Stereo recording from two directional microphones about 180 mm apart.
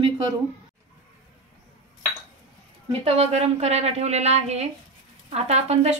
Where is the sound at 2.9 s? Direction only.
35° right (ahead or behind).